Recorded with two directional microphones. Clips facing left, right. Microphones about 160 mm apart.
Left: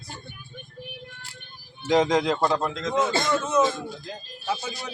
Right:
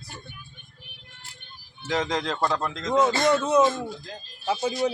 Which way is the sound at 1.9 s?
15° left (ahead or behind).